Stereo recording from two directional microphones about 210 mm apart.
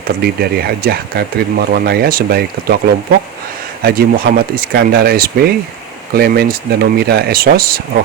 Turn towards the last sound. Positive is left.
turn(degrees=-45)  # may be behind; listen again after turning